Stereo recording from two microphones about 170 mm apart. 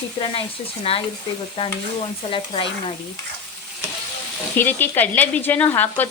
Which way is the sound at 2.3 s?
30° left (ahead or behind).